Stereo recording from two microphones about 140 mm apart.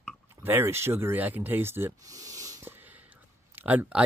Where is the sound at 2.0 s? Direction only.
25° right (ahead or behind).